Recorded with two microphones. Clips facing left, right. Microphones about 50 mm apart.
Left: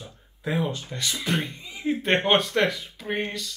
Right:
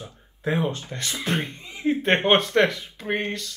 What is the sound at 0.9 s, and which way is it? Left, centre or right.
Speech, right.